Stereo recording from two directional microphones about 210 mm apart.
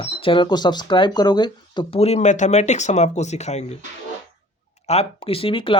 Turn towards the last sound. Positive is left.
turn(degrees=25)  # may be behind; listen again after turning